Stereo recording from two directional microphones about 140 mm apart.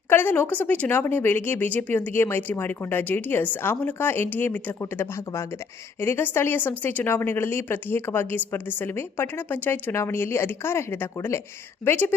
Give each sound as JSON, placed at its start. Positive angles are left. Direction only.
{"t": 0.1, "sound": "speech", "side_deg": 15}